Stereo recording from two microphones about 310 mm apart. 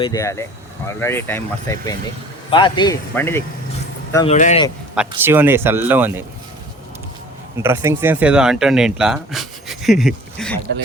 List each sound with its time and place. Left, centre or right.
0.0 s speech: centre
4.9 s speech: centre
7.6 s speech: centre